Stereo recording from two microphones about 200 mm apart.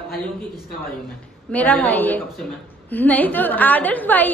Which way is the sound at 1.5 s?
5° left (ahead or behind).